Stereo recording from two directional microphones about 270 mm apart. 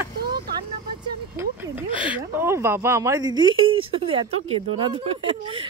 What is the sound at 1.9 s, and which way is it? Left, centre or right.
Speech, centre.